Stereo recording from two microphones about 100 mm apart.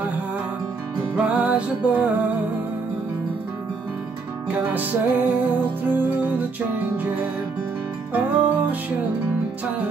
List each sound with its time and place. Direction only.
1.1 s music: 15° right (ahead or behind)
4.5 s music: 20° right (ahead or behind)
8.1 s music: 15° right (ahead or behind)